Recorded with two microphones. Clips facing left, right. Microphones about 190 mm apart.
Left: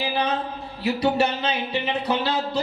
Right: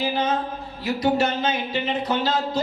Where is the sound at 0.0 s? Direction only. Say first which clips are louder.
Right 1 dB; 65° left (ahead or behind).